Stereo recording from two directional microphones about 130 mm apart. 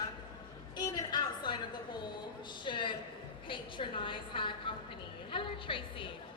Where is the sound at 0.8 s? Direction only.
30° left (ahead or behind).